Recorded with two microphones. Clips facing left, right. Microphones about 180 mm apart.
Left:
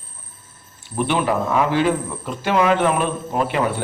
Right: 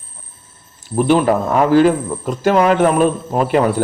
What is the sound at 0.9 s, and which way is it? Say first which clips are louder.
Speech: right 6 dB; 40° right (ahead or behind).